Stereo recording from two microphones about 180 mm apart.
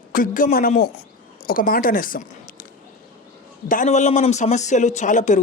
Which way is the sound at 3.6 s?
45° left (ahead or behind).